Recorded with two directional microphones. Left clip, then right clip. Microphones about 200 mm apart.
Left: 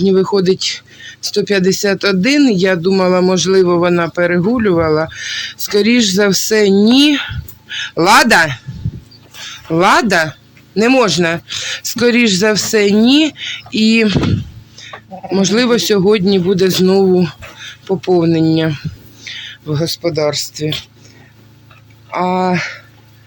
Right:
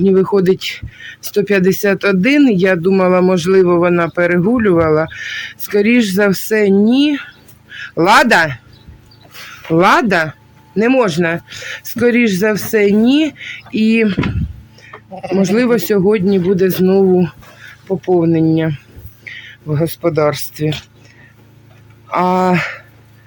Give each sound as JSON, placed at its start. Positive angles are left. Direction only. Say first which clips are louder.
{"t": 0.0, "sound": "speech", "louder": "even", "side_deg": -5}
{"t": 22.1, "sound": "speech", "louder": "right 2 dB", "side_deg": -20}